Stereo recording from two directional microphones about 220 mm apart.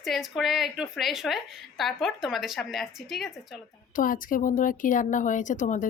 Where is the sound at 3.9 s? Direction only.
40° left (ahead or behind).